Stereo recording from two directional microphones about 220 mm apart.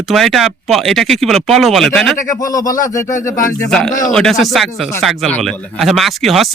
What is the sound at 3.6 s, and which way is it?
Speech, centre (ahead or behind).